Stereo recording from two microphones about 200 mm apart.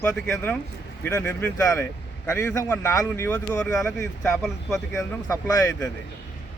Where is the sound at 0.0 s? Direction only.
10° left (ahead or behind).